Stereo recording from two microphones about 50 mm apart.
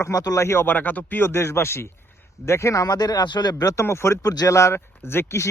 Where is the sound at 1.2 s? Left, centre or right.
Left.